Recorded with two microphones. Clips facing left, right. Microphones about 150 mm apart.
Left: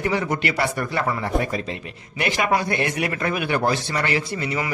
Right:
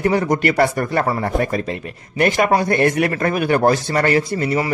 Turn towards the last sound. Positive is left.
turn(degrees=-45)  # may be behind; listen again after turning